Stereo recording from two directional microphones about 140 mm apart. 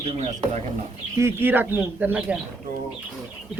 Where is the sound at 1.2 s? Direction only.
15° right (ahead or behind).